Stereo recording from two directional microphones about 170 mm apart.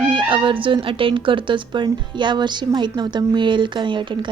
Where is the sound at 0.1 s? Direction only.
30° right (ahead or behind).